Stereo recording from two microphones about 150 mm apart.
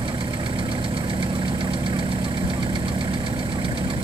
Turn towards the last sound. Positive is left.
turn(degrees=-35)  # may be behind; listen again after turning